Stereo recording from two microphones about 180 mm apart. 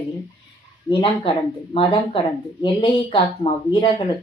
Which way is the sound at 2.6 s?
25° left (ahead or behind).